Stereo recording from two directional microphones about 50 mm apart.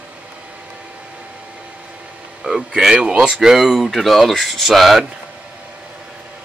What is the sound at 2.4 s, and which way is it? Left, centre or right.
A man's voice, centre.